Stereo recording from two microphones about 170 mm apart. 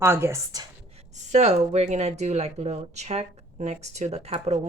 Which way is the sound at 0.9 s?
40° right (ahead or behind).